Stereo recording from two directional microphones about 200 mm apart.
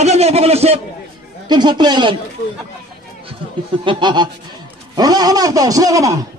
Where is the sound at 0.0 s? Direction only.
30° right (ahead or behind).